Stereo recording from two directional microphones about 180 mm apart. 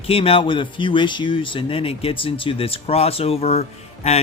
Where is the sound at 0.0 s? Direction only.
30° left (ahead or behind).